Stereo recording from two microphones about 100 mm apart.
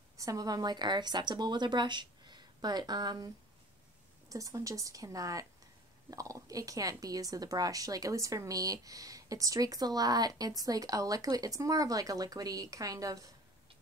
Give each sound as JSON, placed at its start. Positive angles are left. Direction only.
{"t": 0.2, "sound": "a woman's voice", "side_deg": -35}
{"t": 4.3, "sound": "a woman's voice", "side_deg": -35}